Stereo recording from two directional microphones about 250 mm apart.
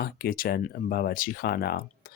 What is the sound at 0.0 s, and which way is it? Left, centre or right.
Speech, left.